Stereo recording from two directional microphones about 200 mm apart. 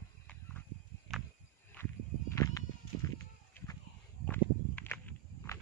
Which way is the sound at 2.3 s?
15° left (ahead or behind).